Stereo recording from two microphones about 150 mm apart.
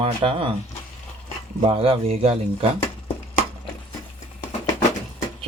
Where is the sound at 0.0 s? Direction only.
40° right (ahead or behind).